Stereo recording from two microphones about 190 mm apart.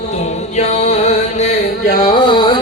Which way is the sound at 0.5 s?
35° left (ahead or behind).